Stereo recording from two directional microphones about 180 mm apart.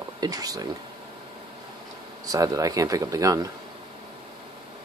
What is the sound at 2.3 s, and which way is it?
Speech, 20° right (ahead or behind).